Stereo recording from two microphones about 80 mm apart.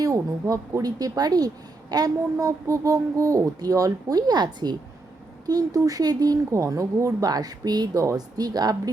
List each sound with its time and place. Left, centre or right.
0.0 s speech: right
5.5 s speech: right